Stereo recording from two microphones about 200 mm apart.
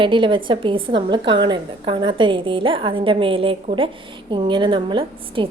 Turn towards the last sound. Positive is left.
turn(degrees=-25)  # may be behind; listen again after turning